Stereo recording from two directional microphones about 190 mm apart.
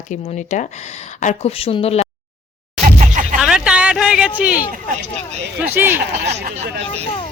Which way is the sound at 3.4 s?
5° right (ahead or behind).